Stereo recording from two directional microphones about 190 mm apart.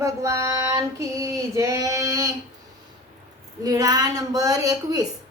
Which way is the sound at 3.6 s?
20° right (ahead or behind).